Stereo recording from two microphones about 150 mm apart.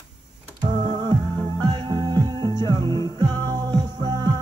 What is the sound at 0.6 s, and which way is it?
Music, 55° right (ahead or behind).